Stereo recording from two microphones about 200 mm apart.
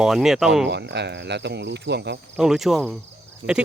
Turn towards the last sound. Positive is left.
turn(degrees=-55)  # may be behind; listen again after turning